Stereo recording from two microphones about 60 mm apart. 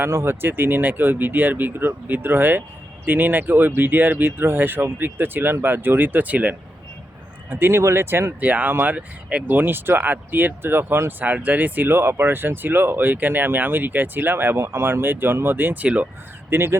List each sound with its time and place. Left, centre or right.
0.0 s speech: right
7.5 s speech: right
8.4 s speech: right
11.3 s speech: right
11.9 s speech: right
16.5 s speech: right